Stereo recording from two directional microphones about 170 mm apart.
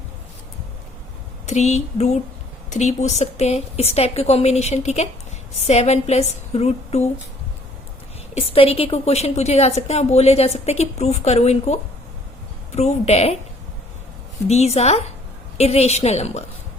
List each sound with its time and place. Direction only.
1.5 s a woman's voice: 40° left (ahead or behind)
8.4 s a woman's voice: 35° left (ahead or behind)
14.4 s a woman's voice: 40° left (ahead or behind)